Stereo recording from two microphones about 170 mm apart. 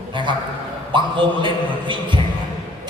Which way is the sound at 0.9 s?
30° right (ahead or behind).